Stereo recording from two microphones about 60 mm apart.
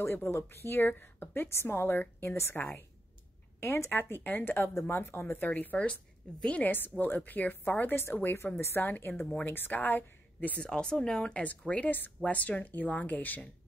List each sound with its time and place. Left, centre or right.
0.0 s a woman's voice: left
3.6 s a woman's voice: left
10.6 s a woman's voice: centre